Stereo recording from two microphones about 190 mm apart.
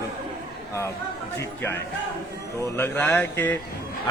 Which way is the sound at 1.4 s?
10° left (ahead or behind).